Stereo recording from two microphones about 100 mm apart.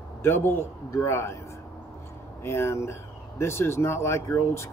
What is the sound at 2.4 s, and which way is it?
Speech, 25° left (ahead or behind).